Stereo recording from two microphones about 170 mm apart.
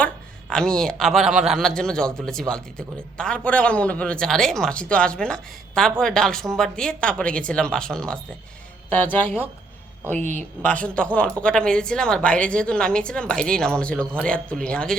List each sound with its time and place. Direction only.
0.5 s a man's voice: 5° left (ahead or behind)
10.2 s speech: 45° right (ahead or behind)
10.6 s a man's voice: 10° left (ahead or behind)